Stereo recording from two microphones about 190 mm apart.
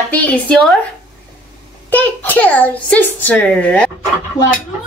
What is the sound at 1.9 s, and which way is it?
A child's voice, 10° left (ahead or behind).